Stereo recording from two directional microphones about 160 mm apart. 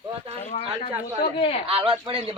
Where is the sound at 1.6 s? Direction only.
35° right (ahead or behind).